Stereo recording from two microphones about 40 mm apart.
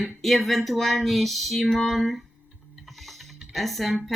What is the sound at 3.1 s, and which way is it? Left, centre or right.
Music, centre.